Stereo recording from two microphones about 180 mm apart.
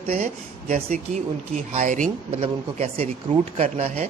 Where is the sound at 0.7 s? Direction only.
40° right (ahead or behind).